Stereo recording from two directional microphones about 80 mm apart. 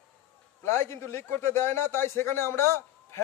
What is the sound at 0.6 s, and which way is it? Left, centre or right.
A man's voice, left.